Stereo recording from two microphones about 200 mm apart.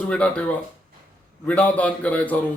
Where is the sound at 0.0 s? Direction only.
5° left (ahead or behind).